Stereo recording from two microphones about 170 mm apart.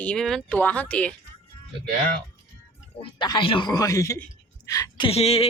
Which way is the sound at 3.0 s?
30° left (ahead or behind).